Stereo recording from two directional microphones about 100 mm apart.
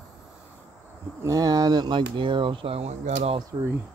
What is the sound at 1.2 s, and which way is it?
Speech, 35° right (ahead or behind).